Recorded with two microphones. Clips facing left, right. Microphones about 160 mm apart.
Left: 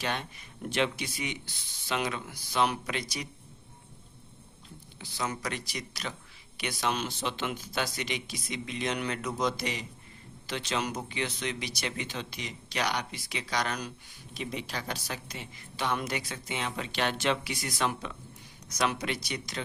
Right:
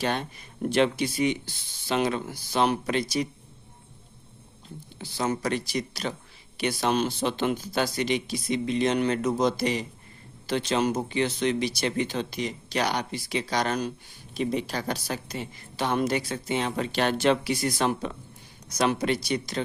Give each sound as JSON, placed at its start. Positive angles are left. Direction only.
{"t": 0.0, "sound": "a woman's voice", "side_deg": -40}
{"t": 4.9, "sound": "a woman's voice", "side_deg": -35}